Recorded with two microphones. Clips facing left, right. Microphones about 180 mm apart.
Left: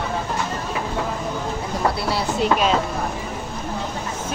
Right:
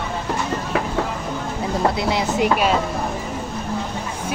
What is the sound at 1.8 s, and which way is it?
Speech, 20° right (ahead or behind).